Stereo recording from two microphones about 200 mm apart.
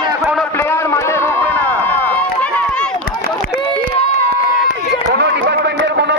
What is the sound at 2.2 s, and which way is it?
Run, 5° left (ahead or behind).